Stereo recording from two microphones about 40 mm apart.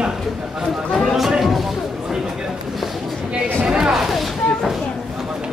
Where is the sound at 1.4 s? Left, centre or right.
Centre.